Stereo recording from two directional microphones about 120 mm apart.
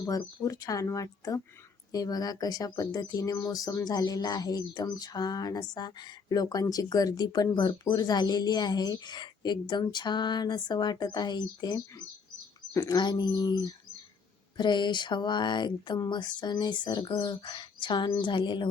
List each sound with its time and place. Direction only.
0.0 s speech: 25° left (ahead or behind); by 18.7 s 40° left (ahead or behind)